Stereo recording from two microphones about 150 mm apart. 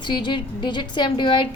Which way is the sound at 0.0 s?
30° left (ahead or behind).